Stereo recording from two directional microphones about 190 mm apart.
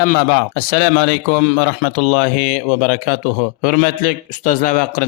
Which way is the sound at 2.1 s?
40° left (ahead or behind).